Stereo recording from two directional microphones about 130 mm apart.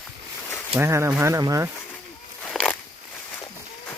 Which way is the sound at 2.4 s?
5° left (ahead or behind).